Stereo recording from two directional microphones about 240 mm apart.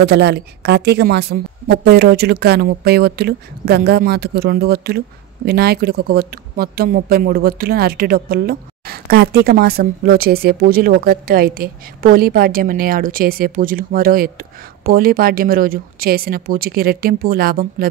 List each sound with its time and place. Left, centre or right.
0.0 s a woman's voice: right